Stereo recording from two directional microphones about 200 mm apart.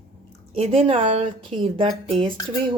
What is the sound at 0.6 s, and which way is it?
Speech, 30° right (ahead or behind).